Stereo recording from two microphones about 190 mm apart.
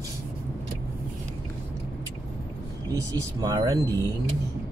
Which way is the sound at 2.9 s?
20° right (ahead or behind).